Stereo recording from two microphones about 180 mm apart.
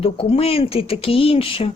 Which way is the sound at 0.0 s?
30° left (ahead or behind).